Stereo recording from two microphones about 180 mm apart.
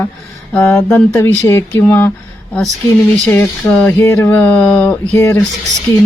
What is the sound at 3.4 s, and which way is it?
Speech, 10° left (ahead or behind).